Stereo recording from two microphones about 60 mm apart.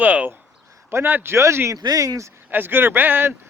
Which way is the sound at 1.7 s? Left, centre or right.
Right.